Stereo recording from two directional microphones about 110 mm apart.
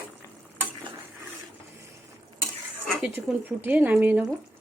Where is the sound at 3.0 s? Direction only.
15° right (ahead or behind).